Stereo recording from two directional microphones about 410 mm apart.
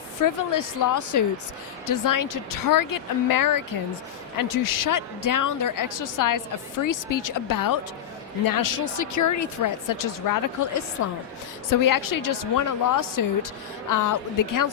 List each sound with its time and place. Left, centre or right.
0.2 s a woman's voice: left